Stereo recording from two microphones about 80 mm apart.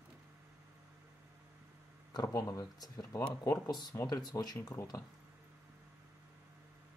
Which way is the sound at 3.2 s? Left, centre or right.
Left.